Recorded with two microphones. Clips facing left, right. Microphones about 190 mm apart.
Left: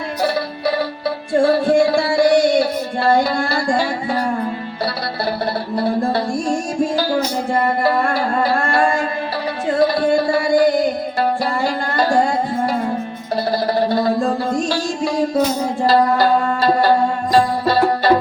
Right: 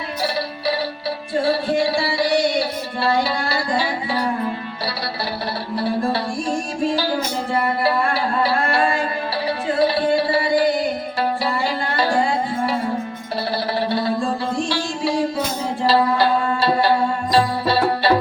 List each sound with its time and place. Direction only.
1.3 s music: 50° left (ahead or behind)
7.6 s music: 45° left (ahead or behind)
13.7 s music: 45° left (ahead or behind)